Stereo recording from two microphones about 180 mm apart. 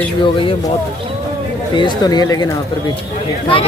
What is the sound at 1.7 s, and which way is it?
Speech, 25° left (ahead or behind).